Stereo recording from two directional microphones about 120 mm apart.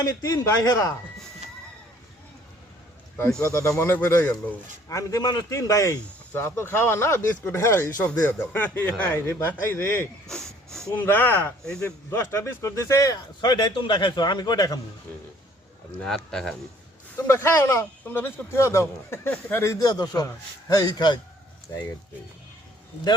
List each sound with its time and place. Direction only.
0.0 s speech: 30° left (ahead or behind)
3.5 s speech: 25° left (ahead or behind)
10.2 s a sound: 5° left (ahead or behind)
10.9 s a man's voice: 15° left (ahead or behind); by 14.8 s 35° left (ahead or behind)
16.0 s speech: 5° left (ahead or behind)
17.2 s a man's voice: 20° left (ahead or behind); by 21.2 s 40° left (ahead or behind)
21.7 s speech: 25° left (ahead or behind)